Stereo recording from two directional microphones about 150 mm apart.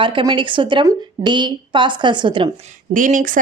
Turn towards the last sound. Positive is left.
turn(degrees=-60)  # may be behind; listen again after turning